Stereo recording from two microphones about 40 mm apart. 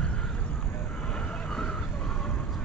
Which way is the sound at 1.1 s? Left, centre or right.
Centre.